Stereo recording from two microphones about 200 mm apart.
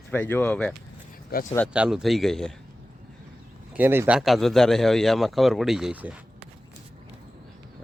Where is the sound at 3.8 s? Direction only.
10° right (ahead or behind).